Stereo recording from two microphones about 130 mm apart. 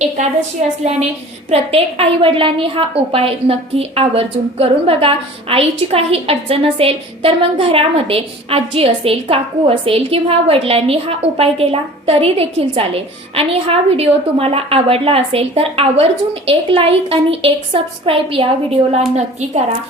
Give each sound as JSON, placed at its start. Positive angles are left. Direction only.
{"t": 1.5, "sound": "a woman's voice", "side_deg": -50}
{"t": 19.1, "sound": "a woman's voice", "side_deg": -60}